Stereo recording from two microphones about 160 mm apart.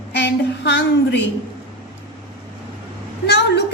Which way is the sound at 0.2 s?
90° left.